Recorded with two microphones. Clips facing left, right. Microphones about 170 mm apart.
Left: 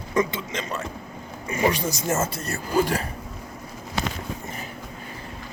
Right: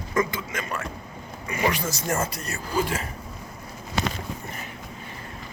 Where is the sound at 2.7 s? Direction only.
35° left (ahead or behind).